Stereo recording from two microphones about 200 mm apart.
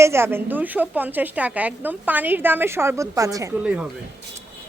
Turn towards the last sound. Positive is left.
turn(degrees=-5)  # may be behind; listen again after turning